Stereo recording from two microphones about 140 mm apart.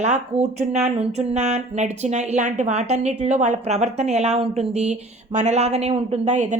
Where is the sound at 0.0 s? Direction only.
55° right (ahead or behind).